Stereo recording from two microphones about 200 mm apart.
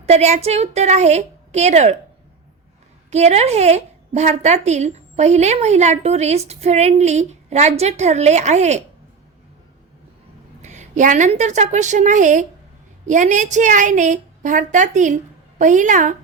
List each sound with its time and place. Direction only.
0.0 s a woman's voice: 35° right (ahead or behind)
3.1 s a woman's voice: 35° right (ahead or behind)
10.6 s a woman's voice: 35° right (ahead or behind)